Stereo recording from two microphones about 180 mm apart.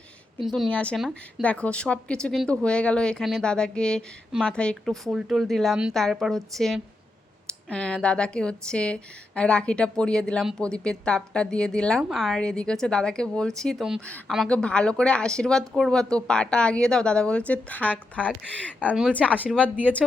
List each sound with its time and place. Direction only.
0.4 s a woman's voice: centre (ahead or behind)